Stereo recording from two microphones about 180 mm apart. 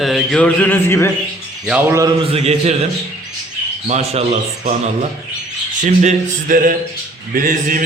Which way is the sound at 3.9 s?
35° right (ahead or behind).